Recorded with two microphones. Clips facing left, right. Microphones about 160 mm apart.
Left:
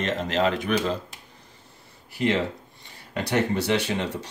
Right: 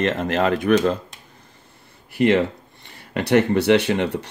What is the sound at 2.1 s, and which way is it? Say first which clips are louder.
Speech: right 7 dB; 60° right (ahead or behind).